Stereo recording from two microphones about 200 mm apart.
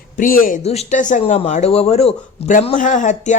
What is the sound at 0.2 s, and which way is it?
Speech, 45° left (ahead or behind).